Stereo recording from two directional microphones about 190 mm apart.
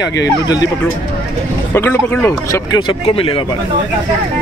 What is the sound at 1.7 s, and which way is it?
Speech, 10° left (ahead or behind).